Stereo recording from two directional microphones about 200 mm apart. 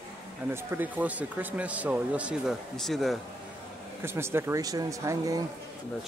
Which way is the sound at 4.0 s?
10° right (ahead or behind).